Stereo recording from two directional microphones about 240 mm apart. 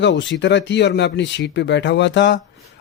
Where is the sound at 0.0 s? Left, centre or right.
Left.